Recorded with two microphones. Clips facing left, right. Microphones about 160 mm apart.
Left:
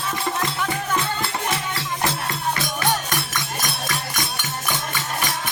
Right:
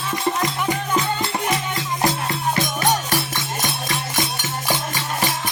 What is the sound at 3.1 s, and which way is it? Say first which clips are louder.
Music: right 3 dB; 25° right (ahead or behind).